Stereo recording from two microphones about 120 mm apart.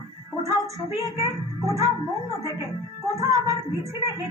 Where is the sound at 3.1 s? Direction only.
25° right (ahead or behind).